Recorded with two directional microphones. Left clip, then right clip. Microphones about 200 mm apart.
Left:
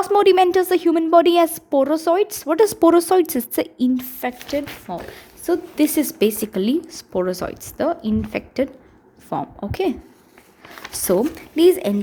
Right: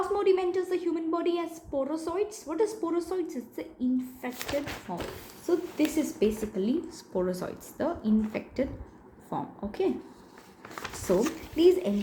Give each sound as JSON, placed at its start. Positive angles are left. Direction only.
{"t": 0.0, "sound": "a woman's voice", "side_deg": 60}
{"t": 11.3, "sound": "speech", "side_deg": 50}